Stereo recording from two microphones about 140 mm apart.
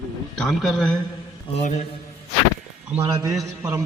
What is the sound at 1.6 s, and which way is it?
Speech, 55° left (ahead or behind).